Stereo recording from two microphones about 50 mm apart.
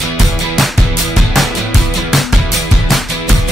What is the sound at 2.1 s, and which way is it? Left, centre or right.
Music, centre.